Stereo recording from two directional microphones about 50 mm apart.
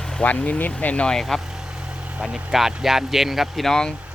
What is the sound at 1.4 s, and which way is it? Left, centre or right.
Vehicle, centre.